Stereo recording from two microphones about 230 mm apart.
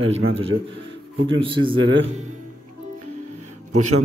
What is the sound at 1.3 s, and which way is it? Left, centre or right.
Speech, right.